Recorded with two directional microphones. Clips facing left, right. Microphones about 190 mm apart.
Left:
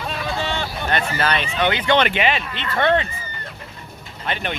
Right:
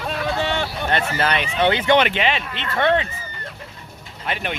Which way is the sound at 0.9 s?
25° right (ahead or behind).